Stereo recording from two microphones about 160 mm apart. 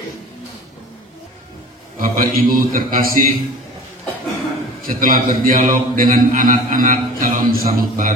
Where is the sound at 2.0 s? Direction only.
60° right (ahead or behind).